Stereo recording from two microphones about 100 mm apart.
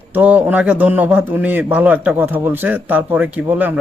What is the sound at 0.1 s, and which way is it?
Speech, 15° right (ahead or behind).